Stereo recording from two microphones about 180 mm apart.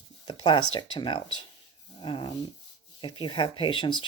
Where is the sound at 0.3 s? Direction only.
25° left (ahead or behind).